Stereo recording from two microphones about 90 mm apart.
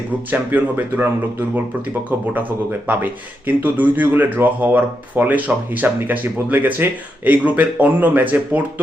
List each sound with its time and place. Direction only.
0.3 s speech: 20° right (ahead or behind)
2.8 s speech: 20° right (ahead or behind)